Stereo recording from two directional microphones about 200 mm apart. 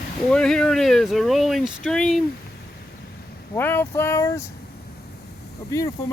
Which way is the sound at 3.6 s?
10° left (ahead or behind).